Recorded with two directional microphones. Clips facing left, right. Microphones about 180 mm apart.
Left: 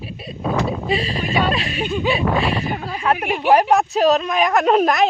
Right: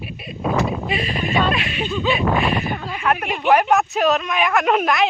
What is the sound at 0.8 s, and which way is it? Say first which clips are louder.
Speech: left 2 dB; 35° left (ahead or behind).